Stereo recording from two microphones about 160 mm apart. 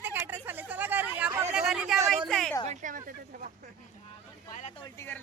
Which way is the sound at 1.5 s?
5° right (ahead or behind).